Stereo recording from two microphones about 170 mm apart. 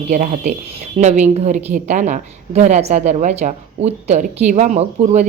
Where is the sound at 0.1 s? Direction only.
45° right (ahead or behind).